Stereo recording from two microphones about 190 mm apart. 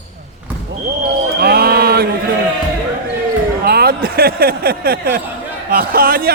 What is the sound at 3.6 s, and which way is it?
A man's voice, 55° right (ahead or behind).